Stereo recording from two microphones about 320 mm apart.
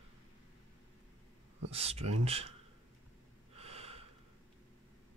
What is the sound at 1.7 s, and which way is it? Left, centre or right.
Speech, centre.